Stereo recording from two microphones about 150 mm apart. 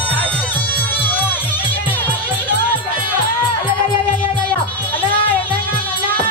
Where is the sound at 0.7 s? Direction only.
10° left (ahead or behind).